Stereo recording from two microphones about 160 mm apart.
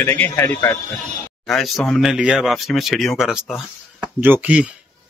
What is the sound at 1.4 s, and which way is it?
Speech, centre (ahead or behind).